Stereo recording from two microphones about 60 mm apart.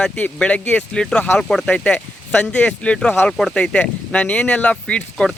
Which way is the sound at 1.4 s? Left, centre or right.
Centre.